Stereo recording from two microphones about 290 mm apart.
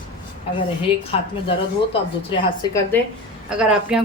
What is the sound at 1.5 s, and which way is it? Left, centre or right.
A woman's voice, centre.